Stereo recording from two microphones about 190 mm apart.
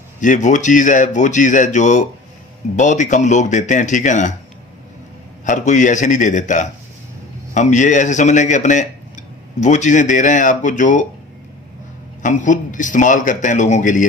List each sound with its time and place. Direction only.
0.2 s speech: 40° left (ahead or behind)
5.4 s speech: 40° left (ahead or behind)
12.2 s a man's voice: 40° left (ahead or behind)